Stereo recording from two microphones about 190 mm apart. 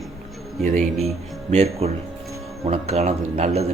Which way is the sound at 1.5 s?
35° right (ahead or behind).